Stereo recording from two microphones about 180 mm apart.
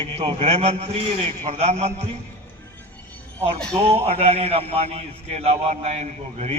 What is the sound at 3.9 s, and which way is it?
A man's voice, 35° right (ahead or behind).